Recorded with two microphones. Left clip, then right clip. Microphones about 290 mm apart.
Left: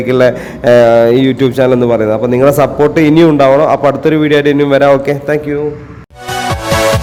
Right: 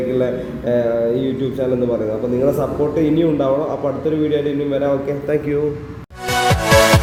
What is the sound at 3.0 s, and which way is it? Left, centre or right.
A man's voice, left.